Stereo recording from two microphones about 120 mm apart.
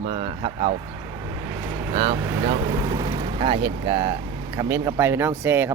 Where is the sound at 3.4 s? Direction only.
45° right (ahead or behind).